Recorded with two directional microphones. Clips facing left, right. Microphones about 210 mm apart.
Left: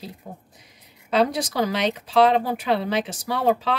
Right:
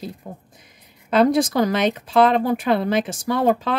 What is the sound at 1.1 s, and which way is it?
Speech, 50° right (ahead or behind).